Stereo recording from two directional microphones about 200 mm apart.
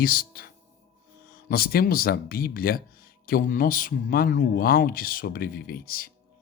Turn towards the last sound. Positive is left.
turn(degrees=50)  # may be behind; listen again after turning